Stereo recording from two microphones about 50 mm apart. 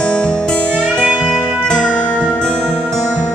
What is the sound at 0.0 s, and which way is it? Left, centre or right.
Music, centre.